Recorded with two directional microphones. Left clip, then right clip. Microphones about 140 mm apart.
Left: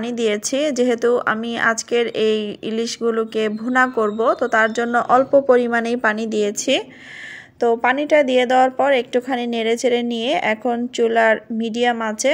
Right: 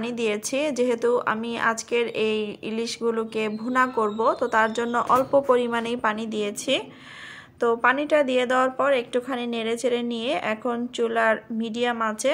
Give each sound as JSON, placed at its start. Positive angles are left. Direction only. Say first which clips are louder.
{"t": 0.0, "sound": "a woman's voice", "louder": "left 6 dB", "side_deg": 30}